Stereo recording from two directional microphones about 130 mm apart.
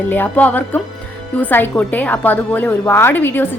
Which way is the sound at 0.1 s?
15° left (ahead or behind).